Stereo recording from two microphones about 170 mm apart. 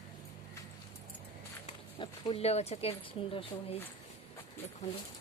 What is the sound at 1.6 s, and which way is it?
Speech, 30° left (ahead or behind).